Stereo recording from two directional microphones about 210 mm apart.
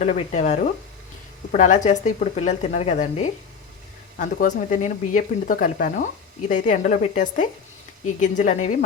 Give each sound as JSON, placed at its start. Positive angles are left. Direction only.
{"t": 0.0, "sound": "speech", "side_deg": 35}